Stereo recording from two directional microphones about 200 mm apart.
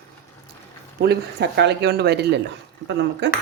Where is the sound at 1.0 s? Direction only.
55° right (ahead or behind).